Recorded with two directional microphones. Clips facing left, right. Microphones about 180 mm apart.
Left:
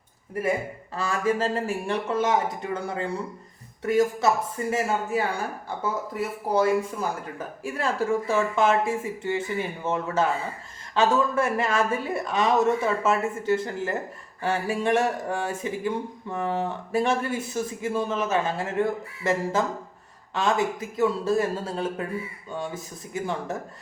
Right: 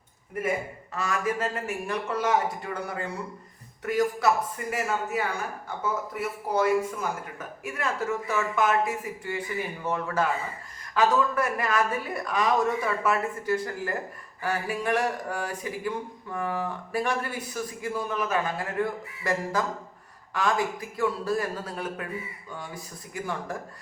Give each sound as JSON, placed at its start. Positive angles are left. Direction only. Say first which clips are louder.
{"t": 0.9, "sound": "speech", "louder": "left 3 dB", "side_deg": 30}